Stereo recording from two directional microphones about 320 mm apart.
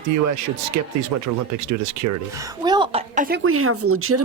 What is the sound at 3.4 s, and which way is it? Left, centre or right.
Speech, right.